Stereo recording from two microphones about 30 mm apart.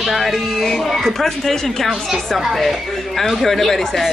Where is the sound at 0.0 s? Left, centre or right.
Centre.